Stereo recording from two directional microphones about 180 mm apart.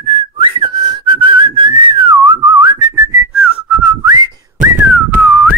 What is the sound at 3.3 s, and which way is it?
Whistling, 5° right (ahead or behind).